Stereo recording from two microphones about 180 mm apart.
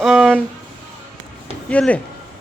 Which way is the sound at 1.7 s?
5° left (ahead or behind).